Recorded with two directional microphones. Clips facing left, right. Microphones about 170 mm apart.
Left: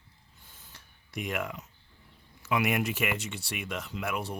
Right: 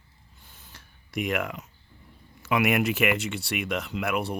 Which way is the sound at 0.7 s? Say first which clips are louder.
Right 7 dB; 85° right.